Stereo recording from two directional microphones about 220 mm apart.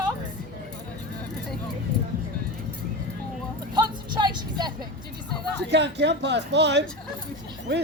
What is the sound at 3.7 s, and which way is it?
Music, 20° right (ahead or behind).